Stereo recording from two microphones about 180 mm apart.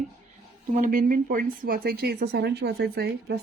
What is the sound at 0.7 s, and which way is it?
Speech, 45° right (ahead or behind).